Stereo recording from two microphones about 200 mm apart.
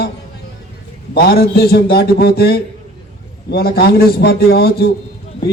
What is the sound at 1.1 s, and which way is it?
Speech, 50° left (ahead or behind).